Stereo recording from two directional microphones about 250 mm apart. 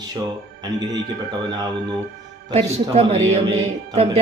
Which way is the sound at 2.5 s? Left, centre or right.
Right.